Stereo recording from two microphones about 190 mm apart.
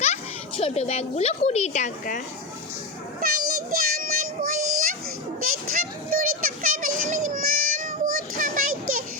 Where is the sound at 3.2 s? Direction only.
50° right (ahead or behind).